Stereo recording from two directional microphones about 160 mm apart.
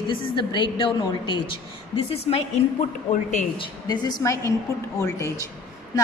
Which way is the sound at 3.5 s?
25° left (ahead or behind).